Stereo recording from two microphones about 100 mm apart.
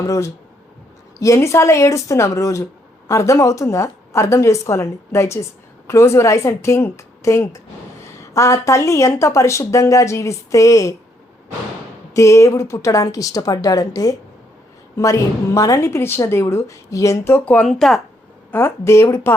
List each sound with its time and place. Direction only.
0.0 s a woman's voice: 30° left (ahead or behind)
12.1 s speech: 30° left (ahead or behind)
17.4 s speech: 15° left (ahead or behind)
17.7 s speech: centre (ahead or behind)
18.5 s a woman's voice: 25° left (ahead or behind)